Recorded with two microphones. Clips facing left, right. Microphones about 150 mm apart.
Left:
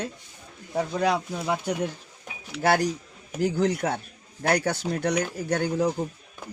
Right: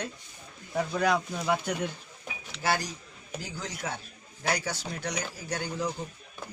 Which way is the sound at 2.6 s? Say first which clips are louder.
Left 8 dB; 60° left (ahead or behind).